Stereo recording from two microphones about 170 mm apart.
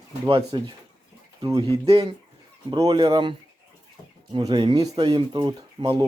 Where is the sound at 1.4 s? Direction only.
20° right (ahead or behind).